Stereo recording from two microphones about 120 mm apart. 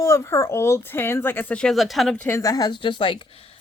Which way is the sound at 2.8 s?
45° left (ahead or behind).